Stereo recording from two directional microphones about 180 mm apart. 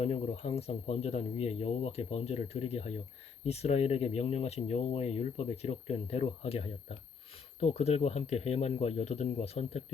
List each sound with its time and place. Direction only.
0.0 s speech: 35° left (ahead or behind)